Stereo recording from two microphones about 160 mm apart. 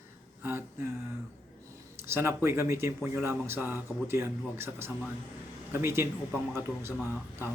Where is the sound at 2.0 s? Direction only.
15° right (ahead or behind).